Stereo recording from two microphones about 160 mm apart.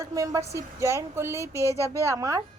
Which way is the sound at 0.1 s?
20° right (ahead or behind).